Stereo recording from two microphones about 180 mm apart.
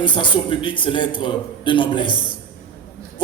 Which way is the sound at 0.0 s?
25° left (ahead or behind).